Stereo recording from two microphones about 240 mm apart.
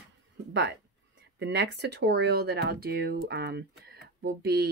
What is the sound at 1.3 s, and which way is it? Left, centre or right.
Speech, right.